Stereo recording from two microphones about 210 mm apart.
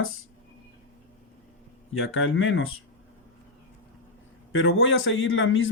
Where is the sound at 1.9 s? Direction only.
70° left (ahead or behind).